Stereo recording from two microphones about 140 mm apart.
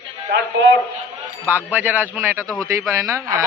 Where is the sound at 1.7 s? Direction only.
15° right (ahead or behind).